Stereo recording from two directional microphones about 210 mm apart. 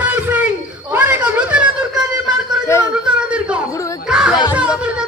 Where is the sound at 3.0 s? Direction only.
5° right (ahead or behind).